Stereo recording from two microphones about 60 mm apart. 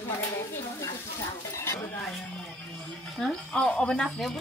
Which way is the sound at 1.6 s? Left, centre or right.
Left.